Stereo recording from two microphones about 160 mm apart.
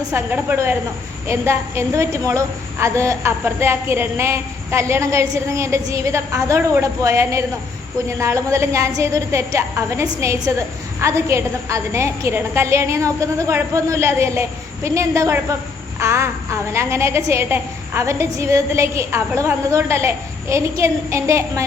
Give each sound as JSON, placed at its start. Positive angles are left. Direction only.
{"t": 0.1, "sound": "a woman's voice", "side_deg": -15}